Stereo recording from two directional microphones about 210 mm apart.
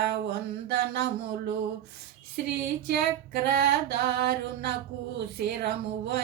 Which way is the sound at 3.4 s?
50° right (ahead or behind).